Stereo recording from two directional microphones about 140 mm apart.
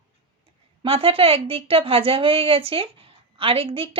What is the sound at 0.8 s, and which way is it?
Speech, 40° right (ahead or behind).